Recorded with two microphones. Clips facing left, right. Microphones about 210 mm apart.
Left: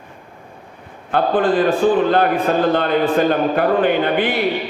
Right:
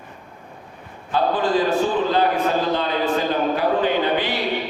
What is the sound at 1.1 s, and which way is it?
A man's voice, 55° left (ahead or behind).